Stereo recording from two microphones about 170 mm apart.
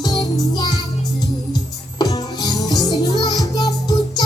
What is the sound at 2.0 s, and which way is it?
Music, 20° left (ahead or behind).